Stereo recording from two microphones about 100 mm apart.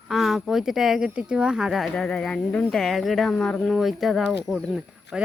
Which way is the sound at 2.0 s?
10° left (ahead or behind).